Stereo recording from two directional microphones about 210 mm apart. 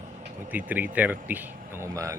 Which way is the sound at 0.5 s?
10° right (ahead or behind).